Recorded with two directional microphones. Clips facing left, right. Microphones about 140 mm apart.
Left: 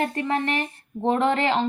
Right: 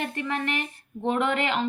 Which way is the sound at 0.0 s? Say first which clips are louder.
Left 5 dB; 35° left (ahead or behind).